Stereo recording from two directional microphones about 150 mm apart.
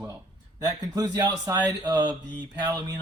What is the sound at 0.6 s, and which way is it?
Speech, 25° right (ahead or behind).